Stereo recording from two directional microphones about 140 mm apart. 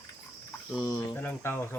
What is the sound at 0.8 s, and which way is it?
Speech, 15° left (ahead or behind).